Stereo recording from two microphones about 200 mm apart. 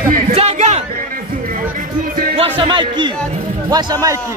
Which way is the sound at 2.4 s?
25° right (ahead or behind).